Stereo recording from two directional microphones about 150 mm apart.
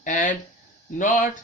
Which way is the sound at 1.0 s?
60° left (ahead or behind).